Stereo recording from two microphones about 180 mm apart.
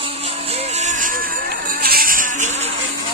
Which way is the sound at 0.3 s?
35° right (ahead or behind).